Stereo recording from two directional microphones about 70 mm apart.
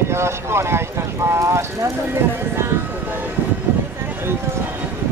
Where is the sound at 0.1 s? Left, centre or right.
Right.